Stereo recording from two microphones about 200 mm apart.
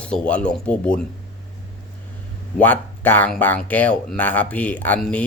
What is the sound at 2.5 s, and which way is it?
Speech, 10° left (ahead or behind).